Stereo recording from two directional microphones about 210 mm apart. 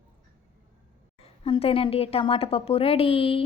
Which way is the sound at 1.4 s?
25° left (ahead or behind).